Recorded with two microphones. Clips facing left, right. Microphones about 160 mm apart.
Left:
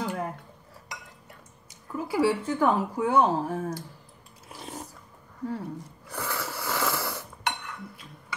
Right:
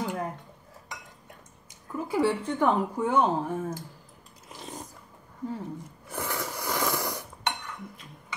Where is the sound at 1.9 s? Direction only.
5° left (ahead or behind).